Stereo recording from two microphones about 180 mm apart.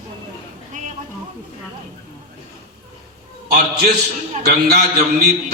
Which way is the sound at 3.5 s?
60° right (ahead or behind).